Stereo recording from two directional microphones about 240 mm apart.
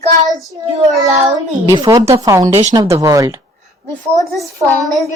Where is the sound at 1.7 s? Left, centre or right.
Centre.